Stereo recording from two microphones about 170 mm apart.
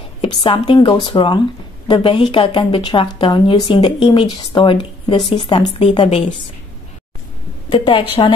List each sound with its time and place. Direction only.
0.2 s a woman's voice: 30° left (ahead or behind)
7.7 s speech: 30° left (ahead or behind)